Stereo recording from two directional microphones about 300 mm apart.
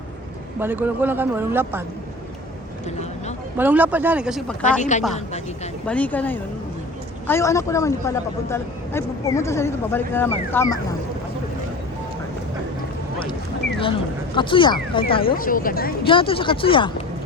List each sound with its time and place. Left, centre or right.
0.6 s speech: centre
3.6 s speech: centre
4.8 s speech: left
5.8 s a man's voice: centre
14.3 s a man's voice: centre
15.4 s speech: left
16.0 s a man's voice: centre